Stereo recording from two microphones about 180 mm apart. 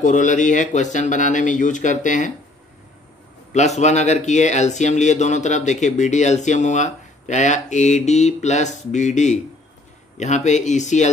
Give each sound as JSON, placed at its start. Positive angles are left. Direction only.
{"t": 0.0, "sound": "speech", "side_deg": 45}
{"t": 3.5, "sound": "speech", "side_deg": 40}